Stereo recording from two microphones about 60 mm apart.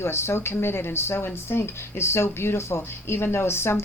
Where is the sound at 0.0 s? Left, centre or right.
Left.